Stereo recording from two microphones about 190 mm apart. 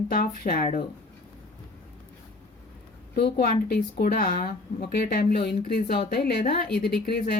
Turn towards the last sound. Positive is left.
turn(degrees=55)  # may be behind; listen again after turning